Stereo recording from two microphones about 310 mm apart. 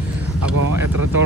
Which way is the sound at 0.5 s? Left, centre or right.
Right.